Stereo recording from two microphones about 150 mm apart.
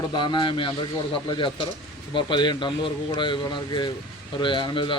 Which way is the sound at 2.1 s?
30° left (ahead or behind).